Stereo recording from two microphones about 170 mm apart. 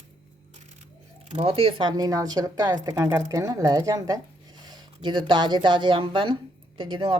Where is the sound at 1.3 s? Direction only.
40° right (ahead or behind).